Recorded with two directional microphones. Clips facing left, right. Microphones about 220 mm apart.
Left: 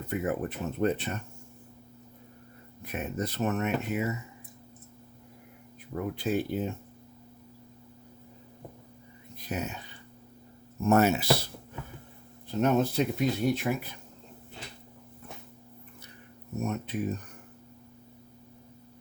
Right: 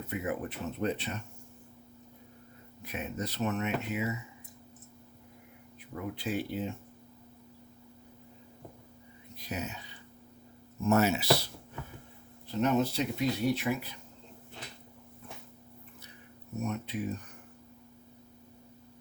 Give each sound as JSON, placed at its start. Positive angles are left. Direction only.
{"t": 0.1, "sound": "speech", "side_deg": 45}
{"t": 2.8, "sound": "speech", "side_deg": 50}
{"t": 5.9, "sound": "speech", "side_deg": 45}
{"t": 9.4, "sound": "speech", "side_deg": 50}
{"t": 12.6, "sound": "speech", "side_deg": 50}
{"t": 16.6, "sound": "speech", "side_deg": 45}